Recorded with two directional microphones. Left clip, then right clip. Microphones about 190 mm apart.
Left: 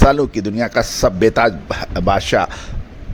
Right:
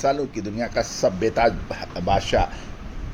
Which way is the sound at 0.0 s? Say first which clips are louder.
Left 9 dB; 55° left (ahead or behind).